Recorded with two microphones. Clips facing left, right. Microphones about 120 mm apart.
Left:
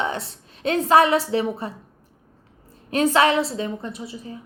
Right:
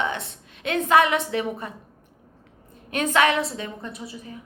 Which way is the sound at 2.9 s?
30° left (ahead or behind).